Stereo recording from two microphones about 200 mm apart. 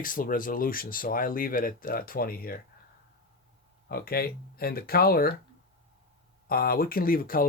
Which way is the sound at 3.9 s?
50° left (ahead or behind).